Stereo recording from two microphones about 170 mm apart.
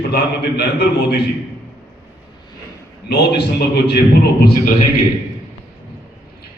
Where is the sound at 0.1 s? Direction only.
65° left (ahead or behind).